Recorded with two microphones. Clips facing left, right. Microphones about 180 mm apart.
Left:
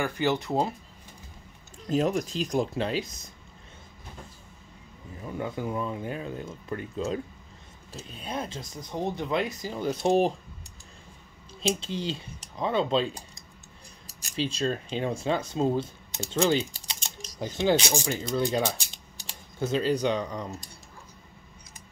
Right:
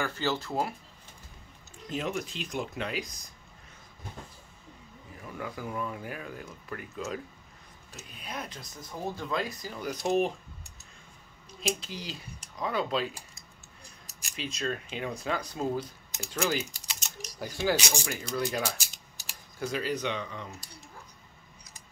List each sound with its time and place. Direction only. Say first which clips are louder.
0.0 s speech: left 4 dB; 15° left (ahead or behind)
1.9 s speech: left 8 dB; 40° left (ahead or behind)
5.2 s speech: left 6 dB; 25° left (ahead or behind)
11.6 s speech: left 6 dB; 25° left (ahead or behind)
14.3 s speech: left 6 dB; 30° left (ahead or behind)